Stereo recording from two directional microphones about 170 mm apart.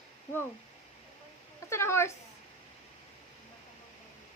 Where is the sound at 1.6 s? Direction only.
15° left (ahead or behind).